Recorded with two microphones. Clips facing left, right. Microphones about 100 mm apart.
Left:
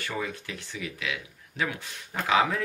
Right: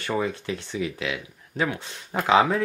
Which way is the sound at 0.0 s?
30° right (ahead or behind).